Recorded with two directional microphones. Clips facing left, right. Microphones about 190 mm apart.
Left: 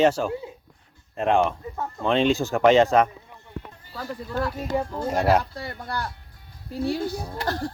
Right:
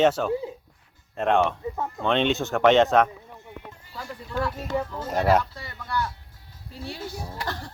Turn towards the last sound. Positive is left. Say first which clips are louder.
# left 5 dB
turn(degrees=40)  # may be behind; listen again after turning